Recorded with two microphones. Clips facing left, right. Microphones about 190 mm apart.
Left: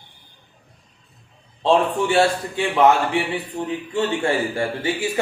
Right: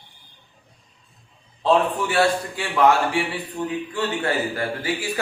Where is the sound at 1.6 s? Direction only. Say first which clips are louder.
Left 2 dB; 25° left (ahead or behind).